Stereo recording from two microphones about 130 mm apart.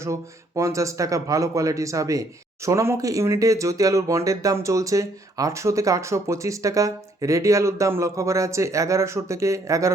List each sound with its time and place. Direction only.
0.0 s speech: 25° right (ahead or behind)